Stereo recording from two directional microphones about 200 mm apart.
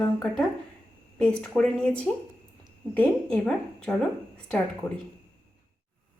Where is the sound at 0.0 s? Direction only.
5° left (ahead or behind).